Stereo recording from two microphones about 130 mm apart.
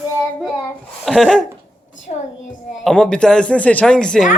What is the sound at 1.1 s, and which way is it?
Speech, centre (ahead or behind).